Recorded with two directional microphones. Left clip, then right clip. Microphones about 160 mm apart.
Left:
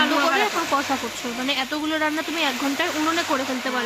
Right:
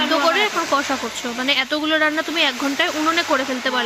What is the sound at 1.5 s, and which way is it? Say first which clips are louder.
Speech: right 6 dB; 15° right (ahead or behind).